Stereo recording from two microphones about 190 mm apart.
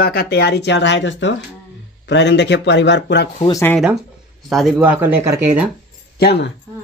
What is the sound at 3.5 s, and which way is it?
Speech, 10° left (ahead or behind).